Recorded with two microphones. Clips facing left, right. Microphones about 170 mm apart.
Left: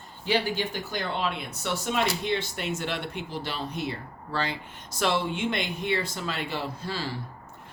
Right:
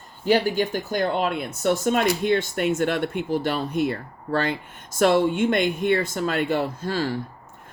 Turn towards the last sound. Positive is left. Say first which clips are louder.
# right 7 dB
turn(degrees=-50)  # may be behind; listen again after turning